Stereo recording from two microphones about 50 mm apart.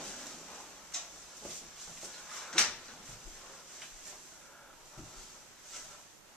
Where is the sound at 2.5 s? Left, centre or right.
Centre.